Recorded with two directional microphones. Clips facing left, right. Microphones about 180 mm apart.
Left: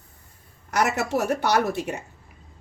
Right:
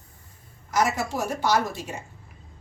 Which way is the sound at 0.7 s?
65° left (ahead or behind).